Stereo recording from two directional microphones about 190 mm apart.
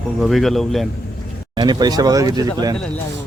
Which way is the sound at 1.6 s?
20° right (ahead or behind).